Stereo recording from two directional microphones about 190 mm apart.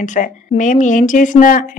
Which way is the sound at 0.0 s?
40° left (ahead or behind).